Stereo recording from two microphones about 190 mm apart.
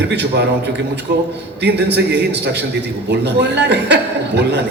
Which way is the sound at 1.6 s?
65° right (ahead or behind).